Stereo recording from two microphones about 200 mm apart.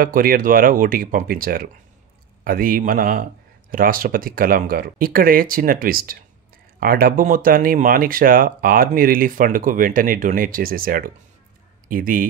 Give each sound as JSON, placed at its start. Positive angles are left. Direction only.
{"t": 0.0, "sound": "speech", "side_deg": -45}